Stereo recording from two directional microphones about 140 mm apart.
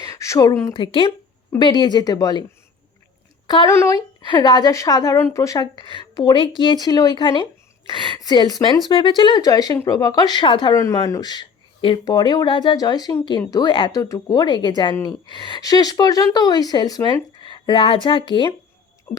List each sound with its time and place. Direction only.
0.0 s a sound: 20° left (ahead or behind)
0.7 s a woman's voice: 35° left (ahead or behind)
3.4 s speech: 30° left (ahead or behind)
4.3 s speech: 30° left (ahead or behind)
5.8 s a woman's voice: 35° left (ahead or behind)
10.8 s a woman's voice: 20° left (ahead or behind)
13.9 s speech: 25° left (ahead or behind)
19.1 s a sound: 15° left (ahead or behind)